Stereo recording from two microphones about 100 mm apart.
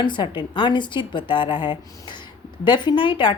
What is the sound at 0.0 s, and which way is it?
A woman's voice, 50° left (ahead or behind).